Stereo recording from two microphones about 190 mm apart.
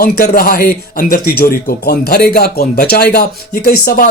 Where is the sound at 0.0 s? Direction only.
50° left (ahead or behind).